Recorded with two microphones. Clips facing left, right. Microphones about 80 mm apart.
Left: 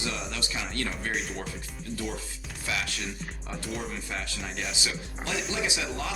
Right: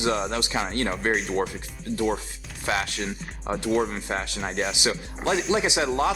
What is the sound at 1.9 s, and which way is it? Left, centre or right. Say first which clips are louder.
Speech: right 10 dB; right.